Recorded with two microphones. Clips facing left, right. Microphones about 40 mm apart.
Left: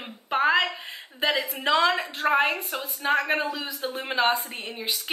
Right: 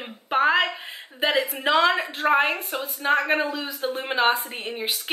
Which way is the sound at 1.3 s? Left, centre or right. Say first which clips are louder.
Right 3 dB; centre.